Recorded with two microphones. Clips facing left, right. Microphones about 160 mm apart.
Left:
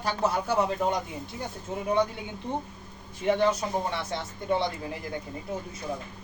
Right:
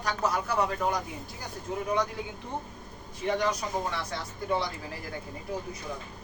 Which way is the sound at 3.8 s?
25° left (ahead or behind).